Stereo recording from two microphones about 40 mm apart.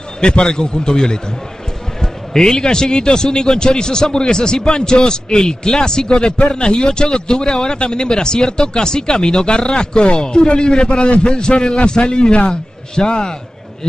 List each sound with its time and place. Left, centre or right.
0.2 s a man's voice: left